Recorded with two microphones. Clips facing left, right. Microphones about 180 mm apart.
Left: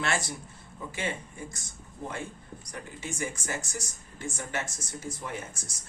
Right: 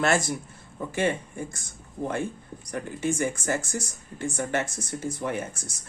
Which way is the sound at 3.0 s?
55° right (ahead or behind).